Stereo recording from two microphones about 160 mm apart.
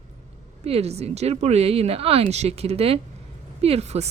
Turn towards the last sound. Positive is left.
turn(degrees=-45)  # may be behind; listen again after turning